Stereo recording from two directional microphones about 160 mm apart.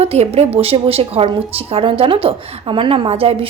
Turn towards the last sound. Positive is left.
turn(degrees=-35)  # may be behind; listen again after turning